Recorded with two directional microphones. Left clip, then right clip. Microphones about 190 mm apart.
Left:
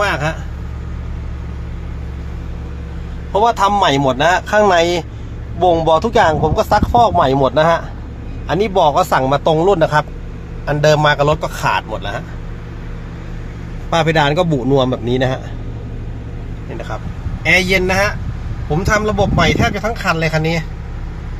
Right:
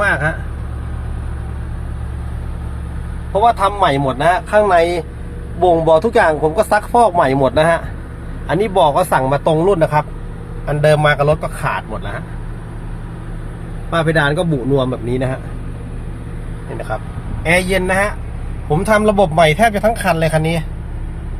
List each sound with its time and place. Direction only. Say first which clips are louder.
0.0 s speech: right 1 dB; 25° left (ahead or behind)
3.4 s speech: even; 20° left (ahead or behind)
5.7 s speech: right 2 dB; 5° left (ahead or behind)
13.9 s speech: left 2 dB; 20° left (ahead or behind)
17.4 s a man's voice: left 2 dB; 10° right (ahead or behind)
18.8 s speech: right 3 dB; 30° right (ahead or behind); by 20.7 s 10° right (ahead or behind)